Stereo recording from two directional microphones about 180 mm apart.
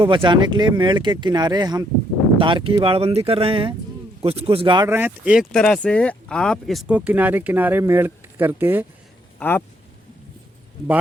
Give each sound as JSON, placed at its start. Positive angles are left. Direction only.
{"t": 0.0, "sound": "speech", "side_deg": -25}
{"t": 4.9, "sound": "speech", "side_deg": -10}
{"t": 9.4, "sound": "speech", "side_deg": 10}